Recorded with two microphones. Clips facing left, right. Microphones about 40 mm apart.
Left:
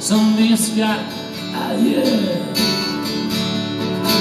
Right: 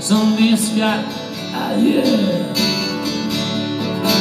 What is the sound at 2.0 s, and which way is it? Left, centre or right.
Music, centre.